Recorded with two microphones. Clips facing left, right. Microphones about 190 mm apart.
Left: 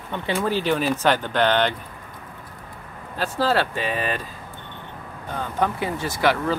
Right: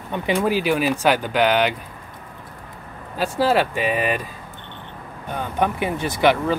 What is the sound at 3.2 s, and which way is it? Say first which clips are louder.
Speech: right 3 dB; 10° right (ahead or behind).